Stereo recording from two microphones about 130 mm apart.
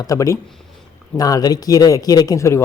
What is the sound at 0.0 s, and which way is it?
Speech, 25° left (ahead or behind).